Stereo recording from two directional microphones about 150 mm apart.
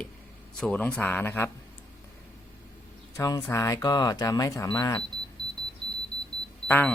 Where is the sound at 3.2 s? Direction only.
20° left (ahead or behind).